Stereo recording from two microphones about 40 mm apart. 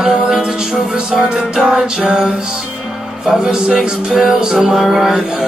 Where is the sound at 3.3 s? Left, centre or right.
Centre.